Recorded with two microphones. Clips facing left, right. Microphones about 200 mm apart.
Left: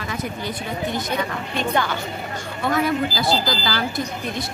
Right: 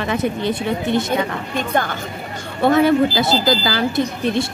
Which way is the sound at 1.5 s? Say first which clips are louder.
Right 2 dB; 50° right (ahead or behind).